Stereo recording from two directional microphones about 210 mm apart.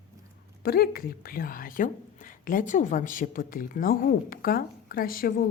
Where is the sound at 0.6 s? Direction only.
45° left (ahead or behind).